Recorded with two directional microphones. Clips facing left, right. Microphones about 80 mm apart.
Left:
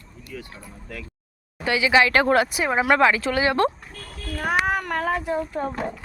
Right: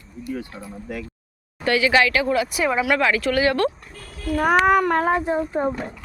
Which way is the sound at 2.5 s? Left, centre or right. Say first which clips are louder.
Even; left.